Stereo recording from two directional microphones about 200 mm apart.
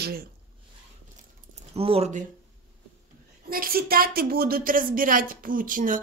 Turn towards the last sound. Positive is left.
turn(degrees=-45)  # may be behind; listen again after turning